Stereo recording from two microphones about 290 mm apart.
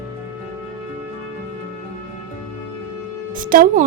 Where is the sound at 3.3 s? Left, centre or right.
Right.